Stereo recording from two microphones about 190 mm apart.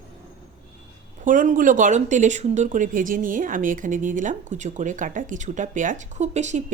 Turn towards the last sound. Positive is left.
turn(degrees=-40)  # may be behind; listen again after turning